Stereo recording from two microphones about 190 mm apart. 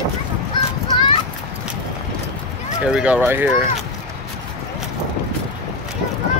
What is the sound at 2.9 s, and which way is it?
Speech, 5° right (ahead or behind).